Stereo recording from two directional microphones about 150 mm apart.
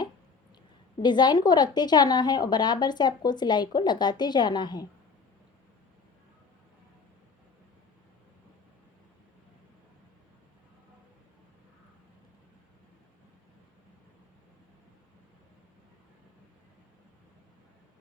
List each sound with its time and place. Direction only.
1.0 s a woman's voice: 30° left (ahead or behind)